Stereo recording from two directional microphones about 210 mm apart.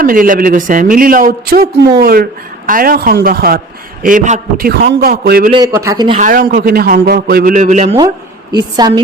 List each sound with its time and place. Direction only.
0.0 s a man's voice: 40° right (ahead or behind)
5.5 s a man's voice: 20° right (ahead or behind)
6.1 s a man's voice: 40° right (ahead or behind)
8.5 s a man's voice: 20° right (ahead or behind)